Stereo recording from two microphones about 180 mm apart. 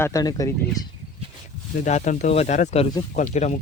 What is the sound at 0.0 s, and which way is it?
Speech, 20° left (ahead or behind).